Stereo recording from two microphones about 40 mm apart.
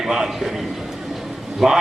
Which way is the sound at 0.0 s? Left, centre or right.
Centre.